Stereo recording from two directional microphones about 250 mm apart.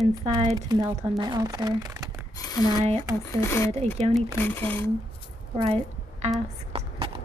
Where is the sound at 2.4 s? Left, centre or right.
Centre.